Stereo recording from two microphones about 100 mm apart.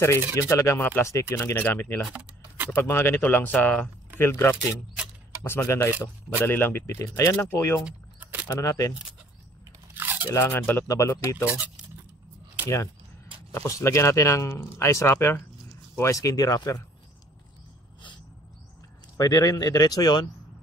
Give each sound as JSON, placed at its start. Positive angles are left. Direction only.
{"t": 0.4, "sound": "speech", "side_deg": 30}
{"t": 2.1, "sound": "keys jangling", "side_deg": -15}
{"t": 2.7, "sound": "speech", "side_deg": 25}
{"t": 4.2, "sound": "speech", "side_deg": 25}
{"t": 7.8, "sound": "a sound", "side_deg": -15}
{"t": 8.5, "sound": "speech", "side_deg": 35}
{"t": 9.9, "sound": "crunch", "side_deg": -15}
{"t": 10.4, "sound": "speech", "side_deg": 20}
{"t": 11.5, "sound": "speech", "side_deg": -15}
{"t": 12.6, "sound": "speech", "side_deg": 30}
{"t": 19.1, "sound": "speech", "side_deg": 40}